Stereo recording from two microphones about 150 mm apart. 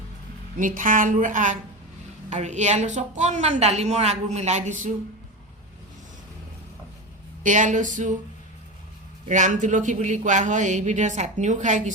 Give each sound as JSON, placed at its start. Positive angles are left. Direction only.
{"t": 0.5, "sound": "a woman's voice", "side_deg": -65}
{"t": 7.4, "sound": "speech", "side_deg": -55}
{"t": 9.3, "sound": "a woman's voice", "side_deg": -55}